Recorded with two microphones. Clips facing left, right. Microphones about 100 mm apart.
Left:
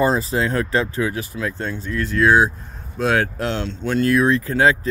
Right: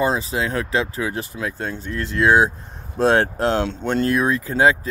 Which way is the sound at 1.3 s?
15° right (ahead or behind).